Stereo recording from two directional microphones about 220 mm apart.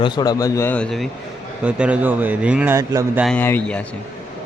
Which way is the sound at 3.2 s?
10° left (ahead or behind).